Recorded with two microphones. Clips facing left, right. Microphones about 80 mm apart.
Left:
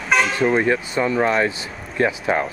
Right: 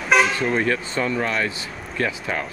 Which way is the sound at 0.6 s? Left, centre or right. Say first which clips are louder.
Left 3 dB; centre.